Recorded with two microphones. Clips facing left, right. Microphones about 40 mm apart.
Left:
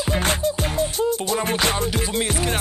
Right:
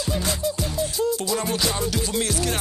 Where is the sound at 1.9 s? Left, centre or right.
Left.